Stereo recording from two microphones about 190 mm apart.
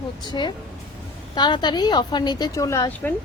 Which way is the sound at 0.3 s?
25° left (ahead or behind).